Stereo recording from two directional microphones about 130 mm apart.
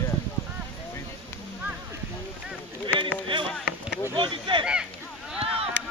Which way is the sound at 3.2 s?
40° right (ahead or behind).